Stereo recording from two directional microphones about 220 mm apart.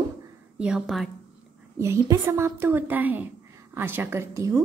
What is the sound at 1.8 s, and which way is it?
A woman's voice, 15° right (ahead or behind).